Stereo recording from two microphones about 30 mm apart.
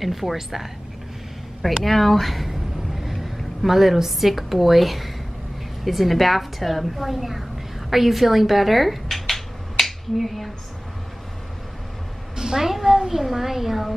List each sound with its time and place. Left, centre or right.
0.0 s a woman's voice: centre
1.9 s a woman's voice: centre
7.9 s a sound: centre
10.1 s a woman's voice: centre
12.4 s a sound: centre
13.2 s a woman's voice: centre